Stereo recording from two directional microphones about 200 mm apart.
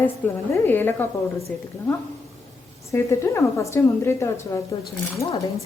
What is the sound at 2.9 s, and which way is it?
A woman's voice, 15° left (ahead or behind).